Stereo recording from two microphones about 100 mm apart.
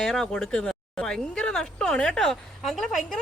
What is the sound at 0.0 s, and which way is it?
Speech, 5° left (ahead or behind).